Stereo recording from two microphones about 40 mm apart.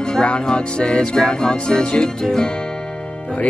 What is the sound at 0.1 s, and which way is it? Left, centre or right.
Music, left.